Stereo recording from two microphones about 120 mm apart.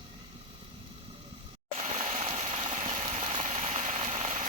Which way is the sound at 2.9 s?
55° right (ahead or behind).